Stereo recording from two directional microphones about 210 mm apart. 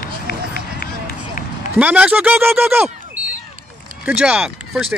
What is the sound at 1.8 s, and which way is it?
Speech, 5° right (ahead or behind).